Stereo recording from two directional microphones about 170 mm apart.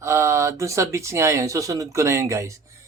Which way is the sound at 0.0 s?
15° right (ahead or behind).